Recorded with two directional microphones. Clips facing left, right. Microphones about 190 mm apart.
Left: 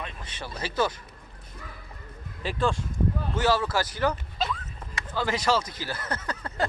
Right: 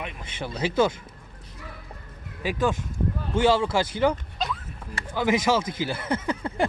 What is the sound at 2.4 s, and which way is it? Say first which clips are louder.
Speech: right 2 dB; 15° right (ahead or behind).